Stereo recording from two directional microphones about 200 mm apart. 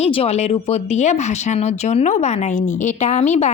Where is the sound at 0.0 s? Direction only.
30° left (ahead or behind).